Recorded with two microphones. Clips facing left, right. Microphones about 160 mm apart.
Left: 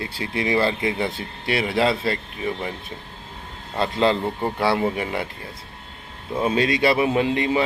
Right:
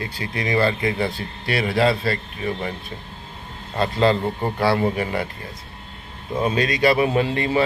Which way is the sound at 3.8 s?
20° left (ahead or behind).